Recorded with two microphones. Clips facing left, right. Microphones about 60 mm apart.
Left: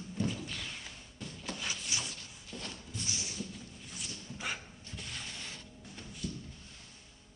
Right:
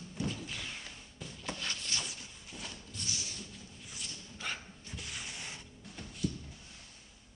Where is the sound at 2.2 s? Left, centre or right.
Centre.